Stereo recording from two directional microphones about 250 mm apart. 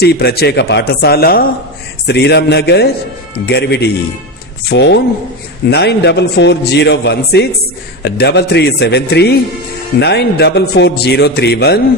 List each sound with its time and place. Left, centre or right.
0.0 s a man's voice: left